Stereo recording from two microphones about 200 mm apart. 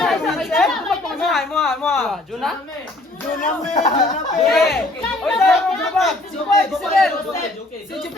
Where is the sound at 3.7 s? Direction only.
30° left (ahead or behind).